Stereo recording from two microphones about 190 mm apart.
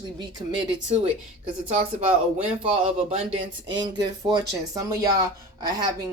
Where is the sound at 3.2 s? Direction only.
40° right (ahead or behind).